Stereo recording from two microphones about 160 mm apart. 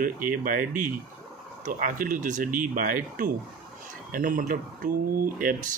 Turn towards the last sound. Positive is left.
turn(degrees=-60)  # may be behind; listen again after turning